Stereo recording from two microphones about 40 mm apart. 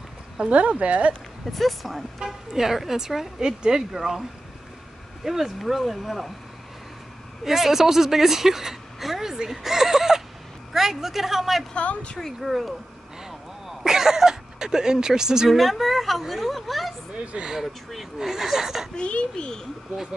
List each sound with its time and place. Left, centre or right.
0.4 s speech: right
1.4 s a woman's voice: centre
7.4 s a woman's voice: centre
11.7 s a child's voice: left
12.4 s a woman's voice: centre
15.5 s a woman's voice: centre
17.2 s speech: right
17.9 s a woman's voice: centre
18.9 s a child's voice: left